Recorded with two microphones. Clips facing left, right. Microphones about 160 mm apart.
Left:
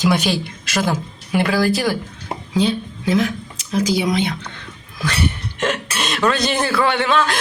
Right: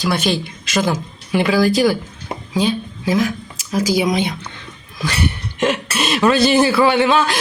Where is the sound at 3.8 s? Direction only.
10° right (ahead or behind).